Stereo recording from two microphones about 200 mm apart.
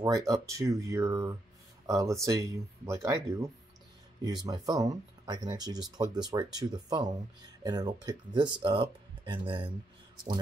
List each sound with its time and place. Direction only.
0.0 s speech: 15° right (ahead or behind)